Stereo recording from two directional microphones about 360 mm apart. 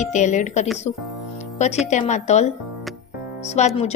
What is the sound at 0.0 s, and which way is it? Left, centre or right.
Speech, centre.